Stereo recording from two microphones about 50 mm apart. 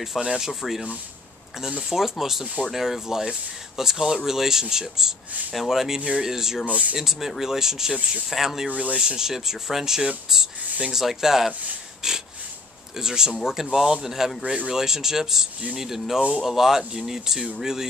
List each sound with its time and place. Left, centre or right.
0.0 s speech: centre
5.9 s speech: centre
6.2 s speech: centre
6.7 s speech: right
7.0 s speech: centre
8.6 s speech: right
9.0 s speech: centre